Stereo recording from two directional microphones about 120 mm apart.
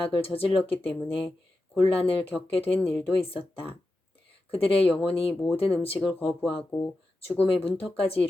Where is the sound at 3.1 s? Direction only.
50° left (ahead or behind).